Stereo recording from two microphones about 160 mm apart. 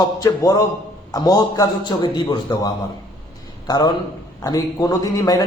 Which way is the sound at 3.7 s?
25° left (ahead or behind).